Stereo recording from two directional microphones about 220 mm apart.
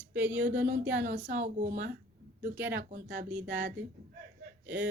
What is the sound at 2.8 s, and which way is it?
Speech, 40° right (ahead or behind).